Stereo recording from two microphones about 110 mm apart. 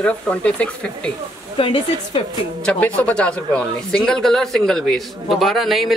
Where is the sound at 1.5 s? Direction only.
50° left (ahead or behind).